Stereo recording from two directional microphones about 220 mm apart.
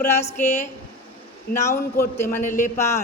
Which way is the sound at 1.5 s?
45° left (ahead or behind).